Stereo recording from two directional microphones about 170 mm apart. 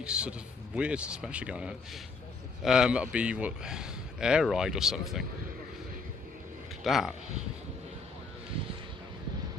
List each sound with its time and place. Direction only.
0.0 s a man's voice: 5° right (ahead or behind)
6.8 s a man's voice: centre (ahead or behind)